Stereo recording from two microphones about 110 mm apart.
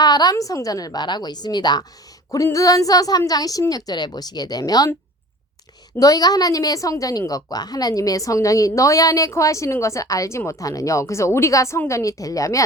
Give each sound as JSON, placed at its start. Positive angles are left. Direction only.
{"t": 0.0, "sound": "a woman's voice", "side_deg": 40}
{"t": 6.0, "sound": "a woman's voice", "side_deg": 35}